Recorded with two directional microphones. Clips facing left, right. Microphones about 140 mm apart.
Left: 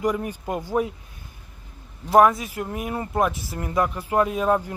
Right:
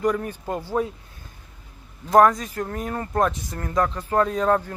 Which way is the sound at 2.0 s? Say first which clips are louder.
Even; 10° left (ahead or behind).